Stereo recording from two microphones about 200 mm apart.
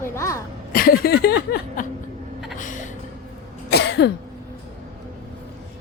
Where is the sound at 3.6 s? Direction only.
55° left (ahead or behind).